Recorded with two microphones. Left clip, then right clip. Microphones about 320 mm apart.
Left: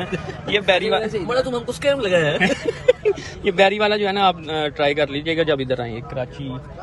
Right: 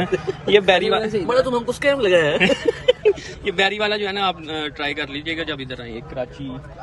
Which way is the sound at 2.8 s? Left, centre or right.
Centre.